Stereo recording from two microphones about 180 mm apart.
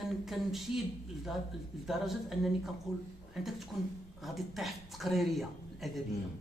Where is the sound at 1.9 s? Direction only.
Centre (ahead or behind).